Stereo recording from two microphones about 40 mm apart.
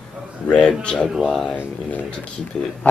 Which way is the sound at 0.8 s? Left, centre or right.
Left.